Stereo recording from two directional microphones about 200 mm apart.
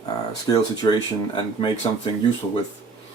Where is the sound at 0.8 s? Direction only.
20° left (ahead or behind).